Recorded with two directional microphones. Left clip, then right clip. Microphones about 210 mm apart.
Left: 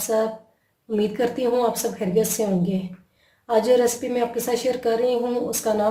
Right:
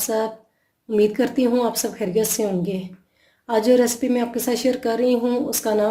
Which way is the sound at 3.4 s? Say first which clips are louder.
Right 1 dB; 40° right (ahead or behind).